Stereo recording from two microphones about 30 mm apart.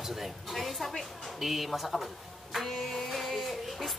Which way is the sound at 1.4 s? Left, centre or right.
Centre.